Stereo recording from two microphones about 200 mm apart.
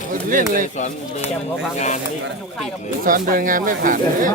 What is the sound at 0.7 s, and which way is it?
Speech, 35° left (ahead or behind).